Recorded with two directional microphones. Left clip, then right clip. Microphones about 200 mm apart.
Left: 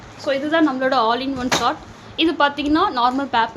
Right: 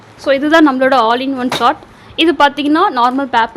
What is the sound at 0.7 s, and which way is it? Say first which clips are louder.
A woman's voice: right 7 dB; 35° right (ahead or behind).